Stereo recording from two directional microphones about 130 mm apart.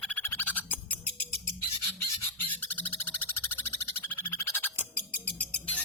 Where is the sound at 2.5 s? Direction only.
15° left (ahead or behind).